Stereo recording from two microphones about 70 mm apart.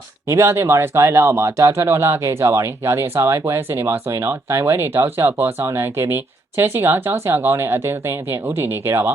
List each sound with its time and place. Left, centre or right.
0.3 s speech: right